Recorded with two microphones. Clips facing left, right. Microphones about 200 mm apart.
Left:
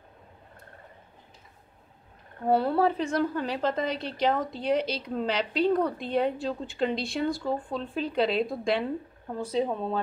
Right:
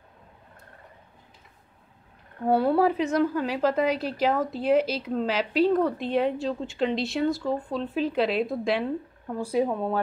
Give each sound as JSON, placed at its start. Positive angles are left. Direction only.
{"t": 2.5, "sound": "a woman's voice", "side_deg": -10}